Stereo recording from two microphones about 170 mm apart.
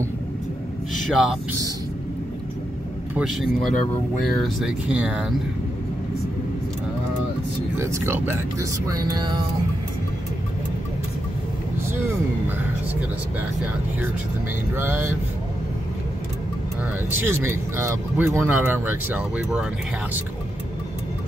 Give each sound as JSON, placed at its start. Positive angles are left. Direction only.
{"t": 1.1, "sound": "speech", "side_deg": -5}
{"t": 3.2, "sound": "speech", "side_deg": -5}
{"t": 7.8, "sound": "speech", "side_deg": -15}
{"t": 14.8, "sound": "speech", "side_deg": -10}
{"t": 17.2, "sound": "speech", "side_deg": -15}